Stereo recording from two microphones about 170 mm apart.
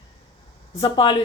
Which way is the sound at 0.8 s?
30° left (ahead or behind).